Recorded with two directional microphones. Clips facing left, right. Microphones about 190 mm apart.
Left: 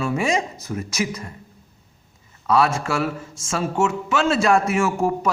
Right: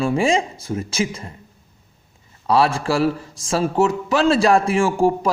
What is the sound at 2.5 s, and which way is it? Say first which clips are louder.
Speech: right 2 dB; 30° right (ahead or behind).